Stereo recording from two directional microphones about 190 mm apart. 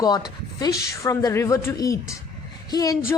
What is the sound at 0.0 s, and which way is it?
Speech, 20° left (ahead or behind).